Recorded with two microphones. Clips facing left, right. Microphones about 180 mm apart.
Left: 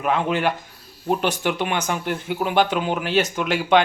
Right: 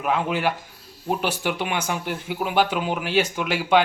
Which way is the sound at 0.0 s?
5° right (ahead or behind).